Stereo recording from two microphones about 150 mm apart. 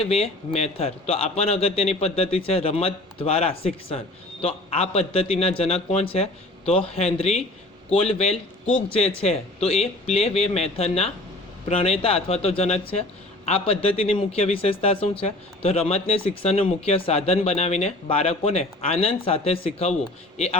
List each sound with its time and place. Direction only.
0.1 s a man's voice: 45° left (ahead or behind)